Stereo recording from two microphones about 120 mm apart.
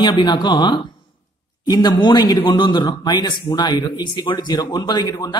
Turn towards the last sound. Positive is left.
turn(degrees=35)  # may be behind; listen again after turning